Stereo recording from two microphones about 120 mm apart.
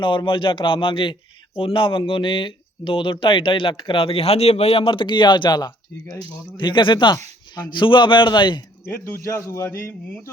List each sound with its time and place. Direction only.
0.0 s a man's voice: 45° left (ahead or behind)
8.9 s a man's voice: 20° left (ahead or behind)